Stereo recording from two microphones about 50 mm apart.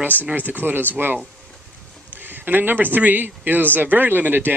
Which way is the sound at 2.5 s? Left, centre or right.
Right.